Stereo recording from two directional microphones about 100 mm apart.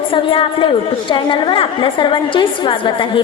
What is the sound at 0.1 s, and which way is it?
A woman's voice, 65° left (ahead or behind).